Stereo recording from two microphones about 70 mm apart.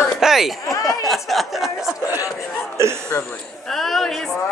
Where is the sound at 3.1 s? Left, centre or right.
Left.